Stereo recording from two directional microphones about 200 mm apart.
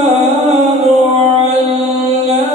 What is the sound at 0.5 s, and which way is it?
Music, 30° right (ahead or behind).